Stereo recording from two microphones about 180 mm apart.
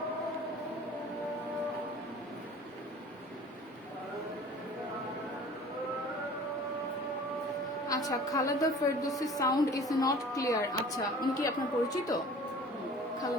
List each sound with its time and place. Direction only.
7.9 s a woman's voice: 20° left (ahead or behind)